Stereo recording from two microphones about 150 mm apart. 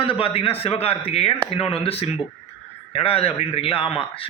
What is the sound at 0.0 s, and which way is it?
A man's voice, 35° left (ahead or behind).